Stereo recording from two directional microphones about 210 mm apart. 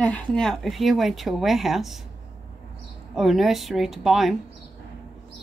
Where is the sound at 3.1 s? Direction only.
Centre (ahead or behind).